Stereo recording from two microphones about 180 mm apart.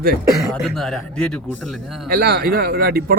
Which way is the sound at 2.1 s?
60° right (ahead or behind).